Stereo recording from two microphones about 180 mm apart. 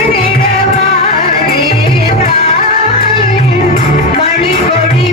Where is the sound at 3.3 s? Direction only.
35° left (ahead or behind).